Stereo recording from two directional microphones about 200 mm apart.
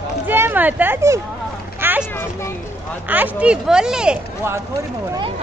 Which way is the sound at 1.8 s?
10° right (ahead or behind).